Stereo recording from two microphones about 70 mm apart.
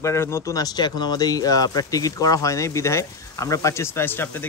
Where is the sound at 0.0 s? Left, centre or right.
Left.